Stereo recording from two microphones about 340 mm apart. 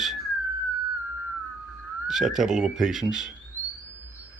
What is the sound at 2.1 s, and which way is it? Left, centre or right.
Speech, centre.